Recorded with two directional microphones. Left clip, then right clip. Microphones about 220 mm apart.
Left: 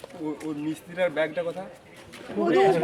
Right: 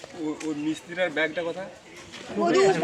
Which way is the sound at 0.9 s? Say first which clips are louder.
Left 1 dB; 50° left (ahead or behind).